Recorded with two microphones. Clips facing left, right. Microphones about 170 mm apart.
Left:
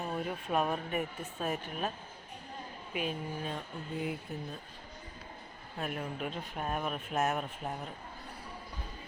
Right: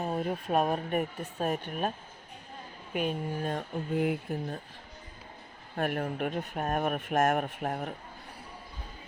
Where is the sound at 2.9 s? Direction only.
50° right (ahead or behind).